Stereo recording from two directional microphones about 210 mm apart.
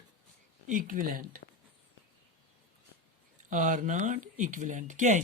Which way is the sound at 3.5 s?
40° right (ahead or behind).